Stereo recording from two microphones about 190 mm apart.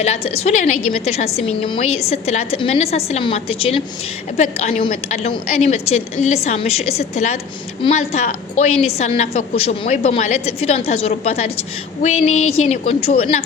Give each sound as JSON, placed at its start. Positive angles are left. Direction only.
{"t": 0.0, "sound": "a woman's voice", "side_deg": 35}